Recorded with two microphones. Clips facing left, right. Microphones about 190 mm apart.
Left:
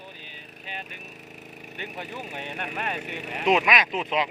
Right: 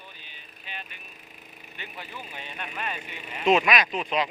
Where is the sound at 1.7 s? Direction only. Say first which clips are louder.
Left 5 dB; 50° left (ahead or behind).